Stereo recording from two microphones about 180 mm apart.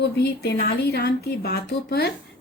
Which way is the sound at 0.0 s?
65° left (ahead or behind).